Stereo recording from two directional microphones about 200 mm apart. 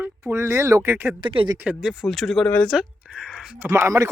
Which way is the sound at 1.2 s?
25° right (ahead or behind).